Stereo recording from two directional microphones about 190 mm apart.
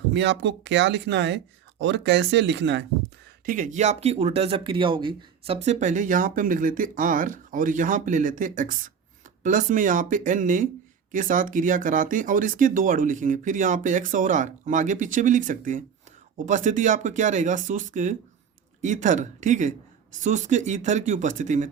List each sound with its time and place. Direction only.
0.1 s speech: 70° right (ahead or behind)
3.4 s speech: 45° right (ahead or behind)